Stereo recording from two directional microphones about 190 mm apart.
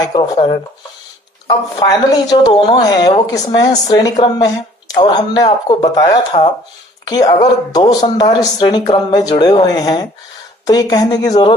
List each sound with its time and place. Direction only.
0.0 s a woman's voice: 20° left (ahead or behind)
1.7 s a woman's voice: 20° left (ahead or behind)
6.3 s speech: 30° left (ahead or behind)
7.1 s a woman's voice: 20° left (ahead or behind)